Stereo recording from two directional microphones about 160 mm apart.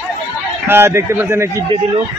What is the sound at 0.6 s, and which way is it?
Speech, 15° right (ahead or behind).